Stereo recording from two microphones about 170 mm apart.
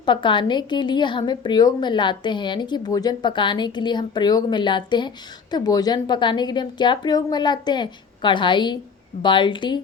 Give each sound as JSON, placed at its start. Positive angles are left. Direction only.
{"t": 0.0, "sound": "a woman's voice", "side_deg": 30}